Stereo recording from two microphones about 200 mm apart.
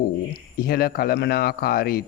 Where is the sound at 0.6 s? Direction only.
50° left (ahead or behind).